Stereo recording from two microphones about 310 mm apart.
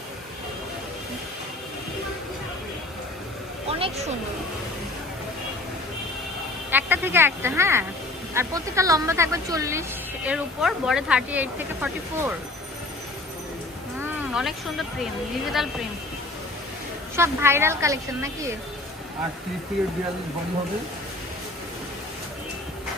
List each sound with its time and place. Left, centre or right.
3.7 s a sound: centre
6.7 s speech: centre
14.3 s speech: centre
17.2 s speech: centre